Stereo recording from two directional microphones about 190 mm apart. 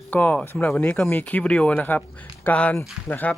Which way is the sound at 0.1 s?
10° left (ahead or behind).